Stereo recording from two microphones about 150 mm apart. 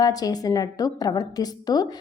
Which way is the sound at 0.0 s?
25° left (ahead or behind).